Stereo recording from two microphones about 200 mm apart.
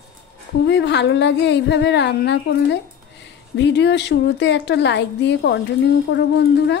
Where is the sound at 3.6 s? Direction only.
60° left (ahead or behind).